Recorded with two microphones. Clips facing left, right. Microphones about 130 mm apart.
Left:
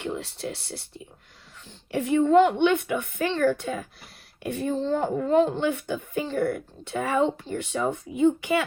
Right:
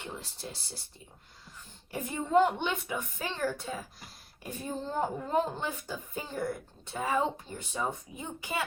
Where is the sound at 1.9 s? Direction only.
75° left (ahead or behind).